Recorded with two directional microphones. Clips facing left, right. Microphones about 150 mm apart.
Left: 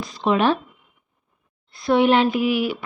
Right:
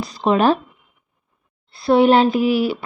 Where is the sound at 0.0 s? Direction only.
40° right (ahead or behind).